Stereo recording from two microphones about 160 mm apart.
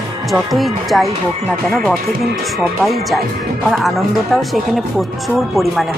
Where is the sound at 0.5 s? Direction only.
Centre (ahead or behind).